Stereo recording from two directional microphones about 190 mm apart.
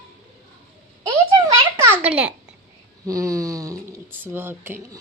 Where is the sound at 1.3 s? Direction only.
15° right (ahead or behind).